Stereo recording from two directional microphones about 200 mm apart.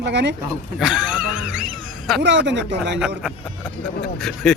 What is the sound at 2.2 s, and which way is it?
Speech, 60° right (ahead or behind).